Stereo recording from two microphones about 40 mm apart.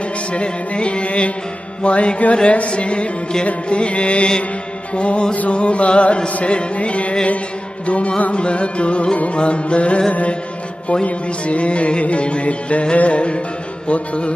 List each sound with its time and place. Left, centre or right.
0.3 s music: left